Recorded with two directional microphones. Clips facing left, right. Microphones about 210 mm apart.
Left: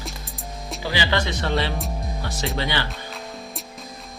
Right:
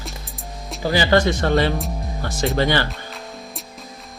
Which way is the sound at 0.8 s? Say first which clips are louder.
Right 7 dB; 45° right (ahead or behind).